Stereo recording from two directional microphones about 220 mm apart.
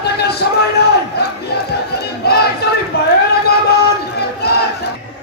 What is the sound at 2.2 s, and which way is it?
Crowd, 45° left (ahead or behind).